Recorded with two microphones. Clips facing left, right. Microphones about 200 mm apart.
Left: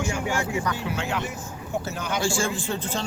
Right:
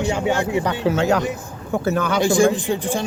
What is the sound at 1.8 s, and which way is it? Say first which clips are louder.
Speech: right 12 dB; 55° right (ahead or behind).